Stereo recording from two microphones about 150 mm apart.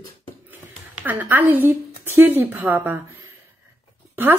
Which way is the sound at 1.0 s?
10° right (ahead or behind).